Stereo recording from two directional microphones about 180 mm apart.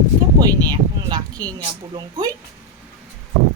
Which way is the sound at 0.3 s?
20° right (ahead or behind).